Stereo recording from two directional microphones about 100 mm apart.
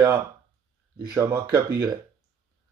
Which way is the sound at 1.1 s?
35° right (ahead or behind).